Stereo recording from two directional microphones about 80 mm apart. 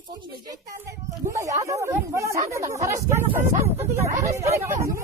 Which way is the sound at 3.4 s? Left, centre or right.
Right.